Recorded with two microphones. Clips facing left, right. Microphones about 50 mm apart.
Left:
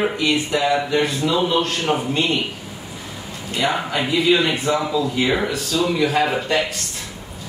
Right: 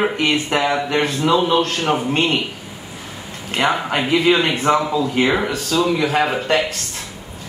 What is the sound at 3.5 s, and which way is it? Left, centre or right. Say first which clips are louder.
A man's voice: right 3 dB; right.